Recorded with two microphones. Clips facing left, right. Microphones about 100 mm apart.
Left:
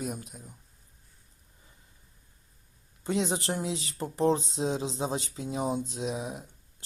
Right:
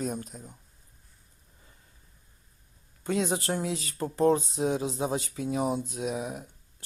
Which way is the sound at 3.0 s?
20° left (ahead or behind).